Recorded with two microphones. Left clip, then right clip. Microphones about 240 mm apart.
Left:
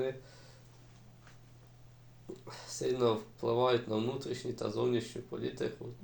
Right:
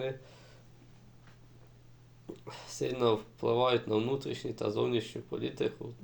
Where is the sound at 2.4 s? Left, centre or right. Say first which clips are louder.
Left 1 dB; right.